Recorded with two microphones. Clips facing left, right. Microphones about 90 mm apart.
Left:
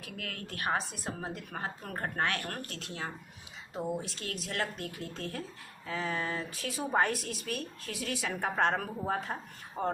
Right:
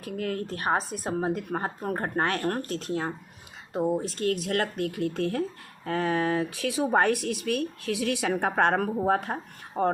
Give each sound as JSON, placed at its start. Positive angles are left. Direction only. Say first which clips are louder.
{"t": 0.0, "sound": "speech", "louder": "right 11 dB", "side_deg": -40}